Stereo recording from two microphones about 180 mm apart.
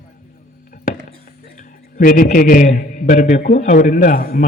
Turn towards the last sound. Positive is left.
turn(degrees=55)  # may be behind; listen again after turning